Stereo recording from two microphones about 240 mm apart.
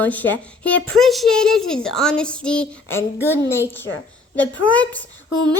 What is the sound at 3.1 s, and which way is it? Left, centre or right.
Speech, centre.